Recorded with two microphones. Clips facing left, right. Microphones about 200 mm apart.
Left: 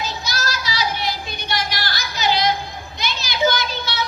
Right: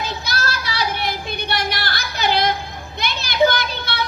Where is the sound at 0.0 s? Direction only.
55° right (ahead or behind).